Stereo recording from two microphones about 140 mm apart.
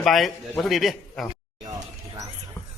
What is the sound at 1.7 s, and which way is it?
Music, 25° right (ahead or behind).